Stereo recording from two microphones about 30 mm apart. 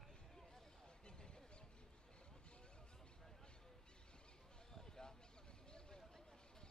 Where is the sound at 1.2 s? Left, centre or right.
Left.